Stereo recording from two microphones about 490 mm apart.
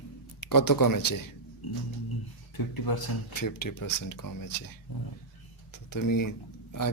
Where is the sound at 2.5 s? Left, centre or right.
Left.